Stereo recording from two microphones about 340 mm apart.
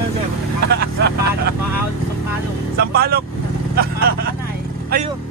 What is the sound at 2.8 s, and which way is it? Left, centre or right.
Speech, right.